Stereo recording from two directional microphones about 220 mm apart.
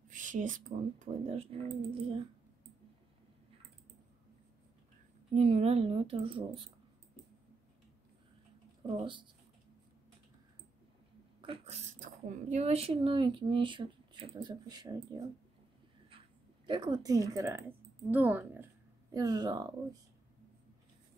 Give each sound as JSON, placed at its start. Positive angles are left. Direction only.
{"t": 0.1, "sound": "speech", "side_deg": -35}
{"t": 5.3, "sound": "speech", "side_deg": -30}
{"t": 8.8, "sound": "speech", "side_deg": -25}
{"t": 11.4, "sound": "speech", "side_deg": -30}
{"t": 16.6, "sound": "speech", "side_deg": -20}